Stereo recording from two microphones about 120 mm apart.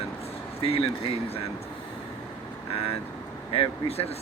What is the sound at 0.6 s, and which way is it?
Speech, 55° left (ahead or behind).